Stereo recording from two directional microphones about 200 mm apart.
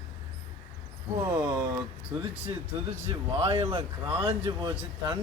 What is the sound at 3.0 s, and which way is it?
A man's voice, 30° right (ahead or behind).